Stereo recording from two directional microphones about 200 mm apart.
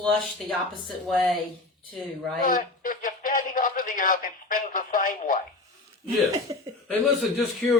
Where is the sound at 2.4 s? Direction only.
45° left (ahead or behind).